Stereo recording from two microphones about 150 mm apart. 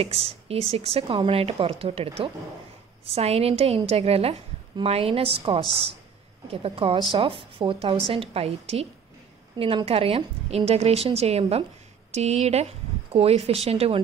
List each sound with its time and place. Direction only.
0.0 s a woman's voice: 40° right (ahead or behind)